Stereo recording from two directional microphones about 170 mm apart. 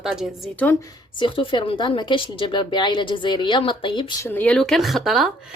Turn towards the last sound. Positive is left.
turn(degrees=-5)  # may be behind; listen again after turning